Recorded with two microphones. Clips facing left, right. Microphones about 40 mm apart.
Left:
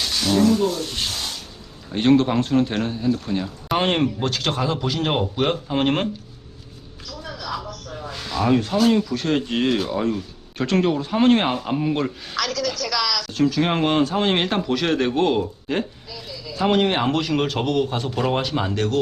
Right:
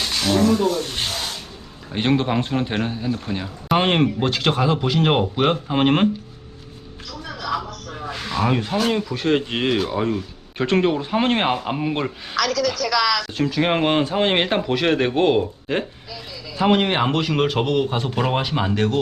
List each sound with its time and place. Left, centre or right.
0.0 s a sound: centre
1.9 s speech: centre
8.0 s speech: right
12.4 s a woman's voice: centre
13.1 s speech: right
13.3 s speech: centre